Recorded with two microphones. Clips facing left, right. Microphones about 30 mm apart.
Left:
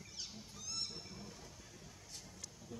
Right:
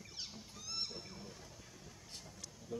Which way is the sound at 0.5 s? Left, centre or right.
Centre.